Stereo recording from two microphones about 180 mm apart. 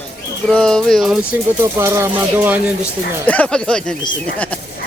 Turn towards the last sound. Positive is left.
turn(degrees=5)  # may be behind; listen again after turning